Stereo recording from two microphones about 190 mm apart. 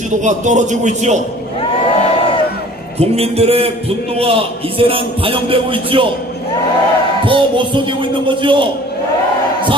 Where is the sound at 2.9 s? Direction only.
30° right (ahead or behind).